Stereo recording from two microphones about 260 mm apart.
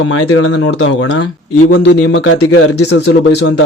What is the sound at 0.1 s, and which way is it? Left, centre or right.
Speech, left.